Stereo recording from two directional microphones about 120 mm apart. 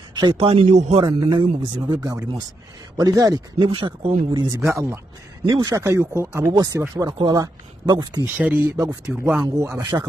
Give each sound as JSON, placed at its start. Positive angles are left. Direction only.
{"t": 0.1, "sound": "speech", "side_deg": -40}
{"t": 0.5, "sound": "a man's voice", "side_deg": -60}
{"t": 1.0, "sound": "a man's voice", "side_deg": -40}
{"t": 3.5, "sound": "speech", "side_deg": -45}
{"t": 4.4, "sound": "a man's voice", "side_deg": -25}
{"t": 7.0, "sound": "a man's voice", "side_deg": -35}
{"t": 8.4, "sound": "speech", "side_deg": -15}
{"t": 9.4, "sound": "a man's voice", "side_deg": -25}